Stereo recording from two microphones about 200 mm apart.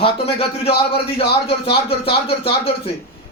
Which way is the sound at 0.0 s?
30° left (ahead or behind).